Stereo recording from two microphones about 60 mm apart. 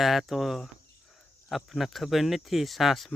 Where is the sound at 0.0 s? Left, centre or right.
Centre.